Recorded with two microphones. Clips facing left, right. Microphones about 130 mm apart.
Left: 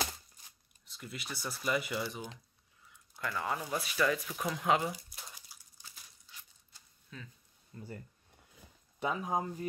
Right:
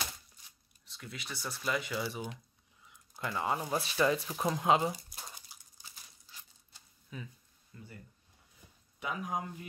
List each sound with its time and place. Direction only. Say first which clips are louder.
0.8 s speech: left 1 dB; centre (ahead or behind)
3.2 s speech: right 2 dB; 20° right (ahead or behind)
5.5 s a sound: right 1 dB; 20° right (ahead or behind)
7.1 s speech: right 4 dB; 10° right (ahead or behind)
7.7 s speech: left 5 dB; 40° left (ahead or behind)
9.0 s speech: left 3 dB; 30° left (ahead or behind)